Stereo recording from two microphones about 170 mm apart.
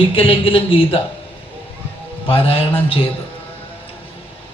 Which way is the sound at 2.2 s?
35° left (ahead or behind).